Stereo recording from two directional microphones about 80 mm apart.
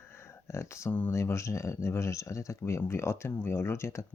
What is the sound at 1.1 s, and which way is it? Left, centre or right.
Speech, left.